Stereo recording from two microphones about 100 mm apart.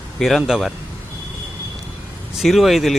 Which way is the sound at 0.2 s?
Centre (ahead or behind).